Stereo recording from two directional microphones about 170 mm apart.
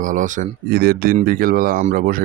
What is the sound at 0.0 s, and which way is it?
Speech, 50° right (ahead or behind).